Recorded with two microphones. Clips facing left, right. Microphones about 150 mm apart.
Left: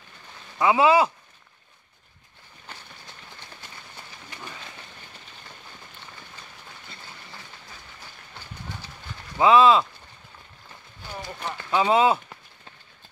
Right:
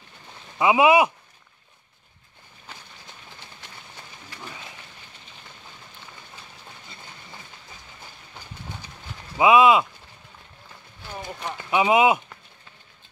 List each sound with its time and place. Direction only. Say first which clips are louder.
0.6 s speech: right 1 dB; 15° right (ahead or behind)
9.4 s speech: right 1 dB; 15° right (ahead or behind)
11.1 s speech: right 1 dB; 20° right (ahead or behind)